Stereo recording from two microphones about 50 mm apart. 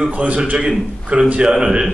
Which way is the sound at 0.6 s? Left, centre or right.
Centre.